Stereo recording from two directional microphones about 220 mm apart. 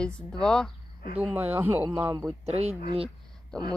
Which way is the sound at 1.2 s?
10° right (ahead or behind).